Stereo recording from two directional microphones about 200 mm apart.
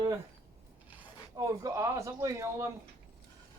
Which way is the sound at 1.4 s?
15° right (ahead or behind).